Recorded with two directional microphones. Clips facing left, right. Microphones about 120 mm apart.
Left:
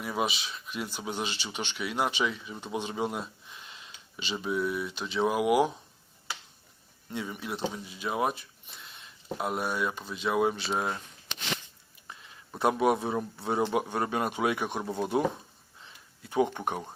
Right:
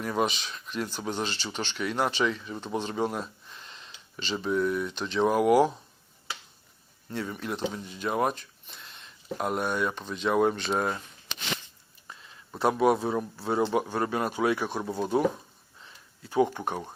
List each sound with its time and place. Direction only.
0.0 s speech: 5° left (ahead or behind)
7.1 s speech: 10° left (ahead or behind)
12.9 s a man's voice: 20° left (ahead or behind)
16.3 s a man's voice: 20° left (ahead or behind)